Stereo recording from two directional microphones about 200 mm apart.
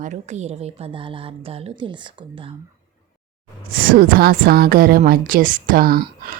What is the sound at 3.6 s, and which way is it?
A woman's voice, 45° right (ahead or behind).